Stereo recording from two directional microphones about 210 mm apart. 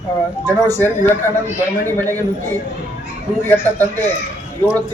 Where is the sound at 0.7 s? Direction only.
10° left (ahead or behind).